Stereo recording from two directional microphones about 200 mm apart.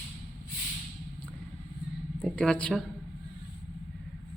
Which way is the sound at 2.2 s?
5° left (ahead or behind).